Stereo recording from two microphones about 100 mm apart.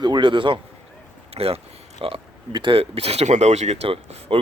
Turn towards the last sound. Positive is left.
turn(degrees=-70)  # may be behind; listen again after turning